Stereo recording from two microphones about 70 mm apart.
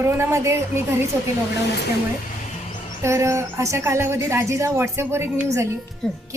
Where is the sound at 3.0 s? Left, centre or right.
Right.